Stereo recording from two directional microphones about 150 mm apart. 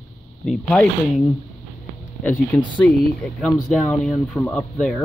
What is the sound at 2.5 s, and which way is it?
Speech, 10° left (ahead or behind).